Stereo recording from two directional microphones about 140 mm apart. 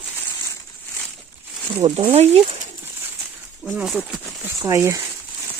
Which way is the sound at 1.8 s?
35° right (ahead or behind).